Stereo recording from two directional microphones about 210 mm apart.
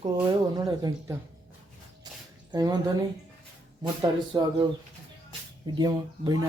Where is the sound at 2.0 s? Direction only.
20° right (ahead or behind).